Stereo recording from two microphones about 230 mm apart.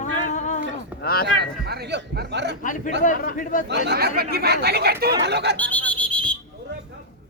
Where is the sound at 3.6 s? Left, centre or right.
Right.